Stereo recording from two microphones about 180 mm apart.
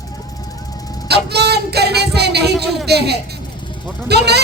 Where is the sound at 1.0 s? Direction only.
65° right (ahead or behind).